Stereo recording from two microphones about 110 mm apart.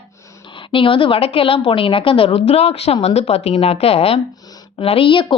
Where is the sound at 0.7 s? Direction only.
50° left (ahead or behind).